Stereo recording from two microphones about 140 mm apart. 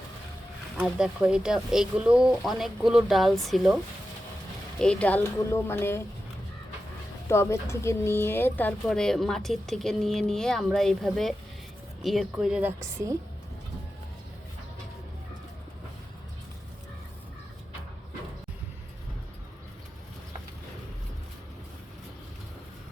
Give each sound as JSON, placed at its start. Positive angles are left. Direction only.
{"t": 0.9, "sound": "speech", "side_deg": -5}
{"t": 4.8, "sound": "speech", "side_deg": 10}
{"t": 7.3, "sound": "speech", "side_deg": 20}
{"t": 12.8, "sound": "a woman's voice", "side_deg": -20}